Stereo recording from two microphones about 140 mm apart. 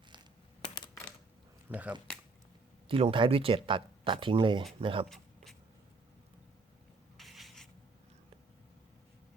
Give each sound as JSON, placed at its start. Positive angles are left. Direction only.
{"t": 1.7, "sound": "speech", "side_deg": -10}
{"t": 2.9, "sound": "speech", "side_deg": -40}
{"t": 5.0, "sound": "a sound", "side_deg": 0}
{"t": 7.2, "sound": "writing", "side_deg": 0}